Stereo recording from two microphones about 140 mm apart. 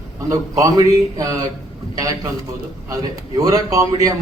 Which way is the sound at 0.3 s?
25° right (ahead or behind).